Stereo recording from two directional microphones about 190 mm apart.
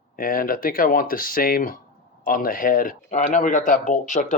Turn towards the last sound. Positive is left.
turn(degrees=40)  # may be behind; listen again after turning